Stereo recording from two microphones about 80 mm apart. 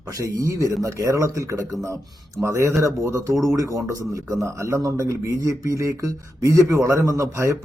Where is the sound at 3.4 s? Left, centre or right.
Right.